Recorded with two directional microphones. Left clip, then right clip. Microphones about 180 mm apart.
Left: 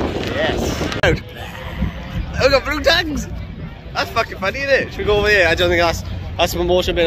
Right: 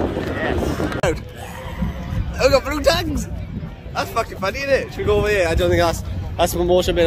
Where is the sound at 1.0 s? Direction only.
Centre (ahead or behind).